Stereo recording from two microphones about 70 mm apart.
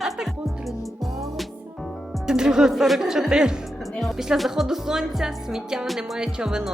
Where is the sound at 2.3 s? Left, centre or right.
Centre.